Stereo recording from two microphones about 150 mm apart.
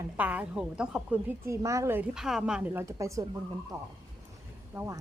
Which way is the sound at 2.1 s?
5° right (ahead or behind).